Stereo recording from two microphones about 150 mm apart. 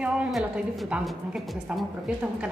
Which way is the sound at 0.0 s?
5° right (ahead or behind).